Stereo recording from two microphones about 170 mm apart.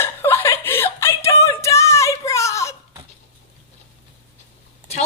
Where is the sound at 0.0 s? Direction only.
15° left (ahead or behind).